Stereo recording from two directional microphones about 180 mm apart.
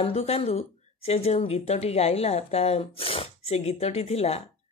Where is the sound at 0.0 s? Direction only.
35° left (ahead or behind).